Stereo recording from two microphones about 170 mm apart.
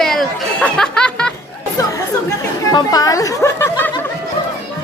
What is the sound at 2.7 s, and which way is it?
Speech, 20° left (ahead or behind).